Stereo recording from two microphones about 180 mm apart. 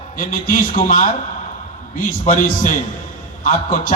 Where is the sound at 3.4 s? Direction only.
50° left (ahead or behind).